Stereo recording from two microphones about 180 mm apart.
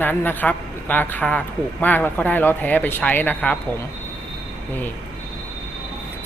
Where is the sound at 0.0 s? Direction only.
10° left (ahead or behind).